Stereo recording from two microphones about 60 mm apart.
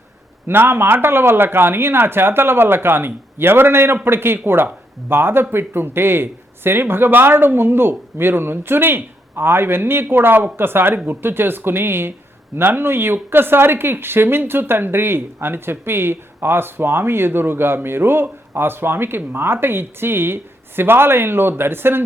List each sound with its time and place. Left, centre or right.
0.4 s speech: right